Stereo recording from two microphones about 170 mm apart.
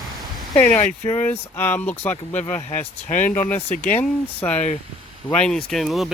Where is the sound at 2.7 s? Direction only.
45° left (ahead or behind).